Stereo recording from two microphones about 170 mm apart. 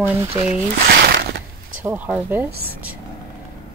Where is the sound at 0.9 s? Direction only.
70° right (ahead or behind).